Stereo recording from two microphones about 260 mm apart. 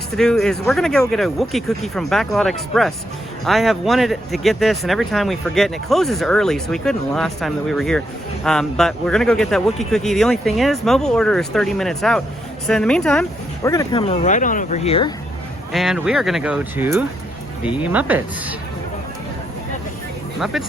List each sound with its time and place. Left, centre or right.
0.2 s speech: centre
13.7 s speech: centre
15.7 s speech: centre
20.4 s speech: centre